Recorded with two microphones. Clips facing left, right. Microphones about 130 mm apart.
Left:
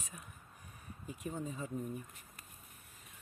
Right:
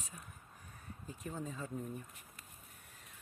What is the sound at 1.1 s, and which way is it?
Speech, 5° left (ahead or behind).